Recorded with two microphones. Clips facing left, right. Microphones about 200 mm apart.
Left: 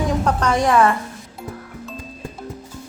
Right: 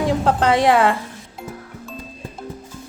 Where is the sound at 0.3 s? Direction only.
30° right (ahead or behind).